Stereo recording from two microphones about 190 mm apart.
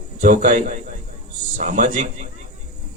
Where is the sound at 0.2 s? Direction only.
40° right (ahead or behind).